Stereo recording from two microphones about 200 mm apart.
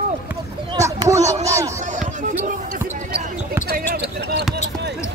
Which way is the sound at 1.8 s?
40° right (ahead or behind).